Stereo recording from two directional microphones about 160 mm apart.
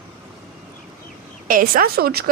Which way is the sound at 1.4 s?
60° right (ahead or behind).